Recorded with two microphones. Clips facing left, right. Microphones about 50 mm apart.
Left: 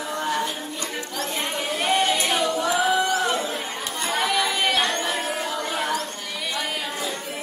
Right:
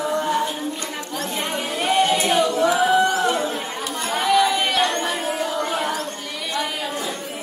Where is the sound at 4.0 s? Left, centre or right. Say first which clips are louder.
Right 5 dB; centre.